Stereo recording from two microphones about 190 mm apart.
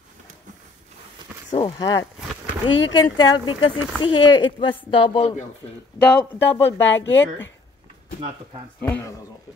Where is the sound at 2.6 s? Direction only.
25° left (ahead or behind).